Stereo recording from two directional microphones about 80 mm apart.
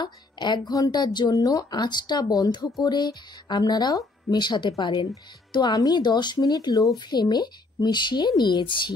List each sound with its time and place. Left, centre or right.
0.0 s a woman's voice: left
1.3 s speech: left
4.3 s speech: left
5.5 s speech: left
7.1 s speech: left